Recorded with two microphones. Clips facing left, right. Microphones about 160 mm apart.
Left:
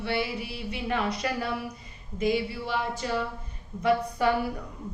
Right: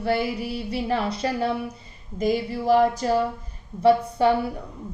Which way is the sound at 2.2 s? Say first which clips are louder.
Right 3 dB; 40° right (ahead or behind).